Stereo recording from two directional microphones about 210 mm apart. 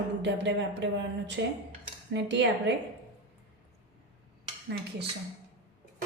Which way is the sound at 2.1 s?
55° right (ahead or behind).